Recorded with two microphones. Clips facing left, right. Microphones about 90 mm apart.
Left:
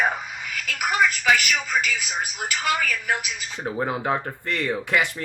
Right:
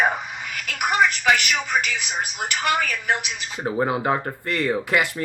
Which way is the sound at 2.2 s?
70° right (ahead or behind).